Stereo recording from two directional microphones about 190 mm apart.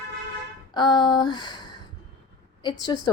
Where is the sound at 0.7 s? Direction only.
20° left (ahead or behind).